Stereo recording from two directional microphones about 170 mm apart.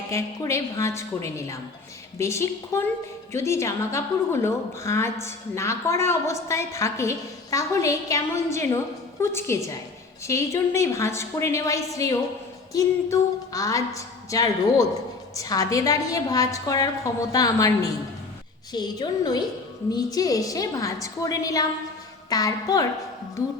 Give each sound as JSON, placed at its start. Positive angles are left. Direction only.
{"t": 0.1, "sound": "a woman's voice", "side_deg": 15}